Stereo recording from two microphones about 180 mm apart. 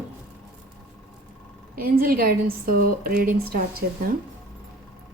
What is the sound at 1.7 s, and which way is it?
A woman's voice, 55° right (ahead or behind).